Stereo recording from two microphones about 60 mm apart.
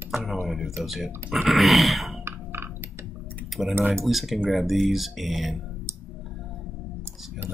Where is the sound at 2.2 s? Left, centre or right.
Right.